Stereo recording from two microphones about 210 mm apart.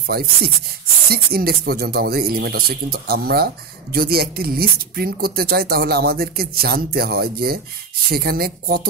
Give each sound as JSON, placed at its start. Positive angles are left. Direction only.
{"t": 0.0, "sound": "speech", "side_deg": -45}